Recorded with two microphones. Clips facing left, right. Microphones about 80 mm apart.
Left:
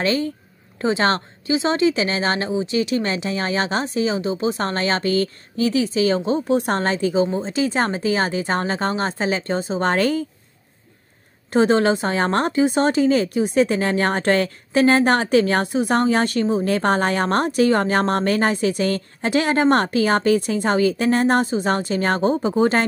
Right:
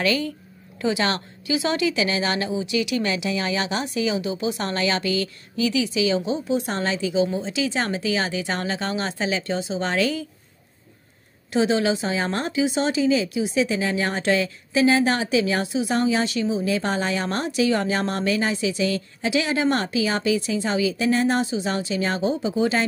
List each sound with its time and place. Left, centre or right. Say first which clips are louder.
0.0 s speech: left 2 dB; left
11.5 s speech: left 4 dB; left